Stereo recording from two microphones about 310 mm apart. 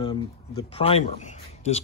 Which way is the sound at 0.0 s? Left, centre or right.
Centre.